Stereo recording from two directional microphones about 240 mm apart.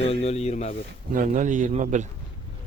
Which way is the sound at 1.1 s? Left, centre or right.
Right.